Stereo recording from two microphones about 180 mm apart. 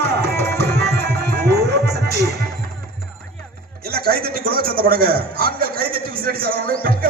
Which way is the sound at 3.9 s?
60° right (ahead or behind).